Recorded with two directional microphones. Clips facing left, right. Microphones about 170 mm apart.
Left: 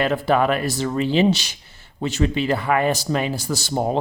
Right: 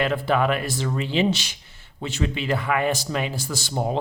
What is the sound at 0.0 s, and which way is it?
Speech, 40° left (ahead or behind).